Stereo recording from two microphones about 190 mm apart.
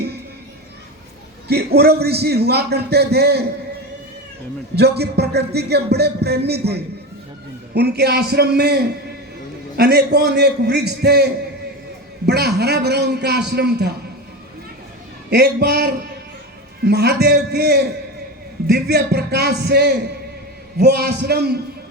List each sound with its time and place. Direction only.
1.5 s music: 55° right (ahead or behind)
4.7 s music: 60° right (ahead or behind)
15.3 s music: 60° right (ahead or behind)